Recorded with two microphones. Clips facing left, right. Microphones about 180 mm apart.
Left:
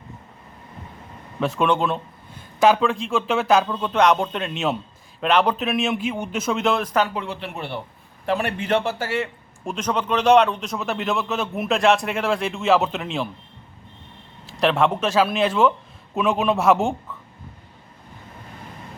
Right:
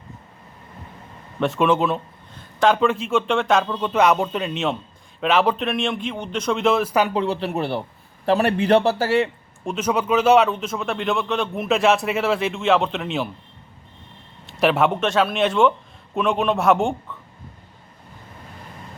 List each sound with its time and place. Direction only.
1.4 s a man's voice: centre (ahead or behind)
7.1 s a man's voice: 35° right (ahead or behind)
9.6 s a man's voice: 5° right (ahead or behind)
14.4 s a man's voice: 5° right (ahead or behind)